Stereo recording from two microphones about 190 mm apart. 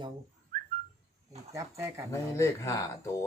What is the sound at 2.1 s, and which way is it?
Speech, 15° left (ahead or behind).